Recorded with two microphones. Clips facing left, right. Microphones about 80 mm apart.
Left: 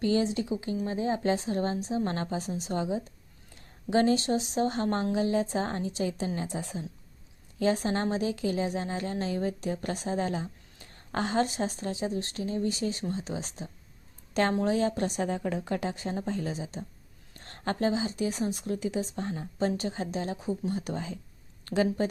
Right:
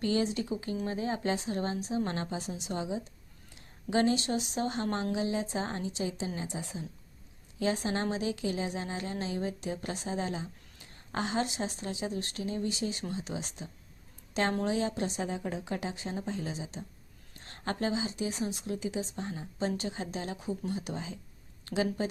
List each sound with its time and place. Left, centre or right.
0.0 s speech: left
0.4 s a woman's voice: left
15.0 s a woman's voice: left
15.6 s a woman's voice: left
20.7 s a woman's voice: left